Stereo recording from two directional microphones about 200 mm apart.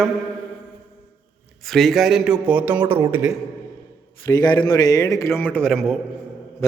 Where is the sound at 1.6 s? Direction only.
Centre (ahead or behind).